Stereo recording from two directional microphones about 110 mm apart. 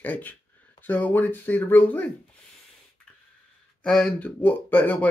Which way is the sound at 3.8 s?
5° left (ahead or behind).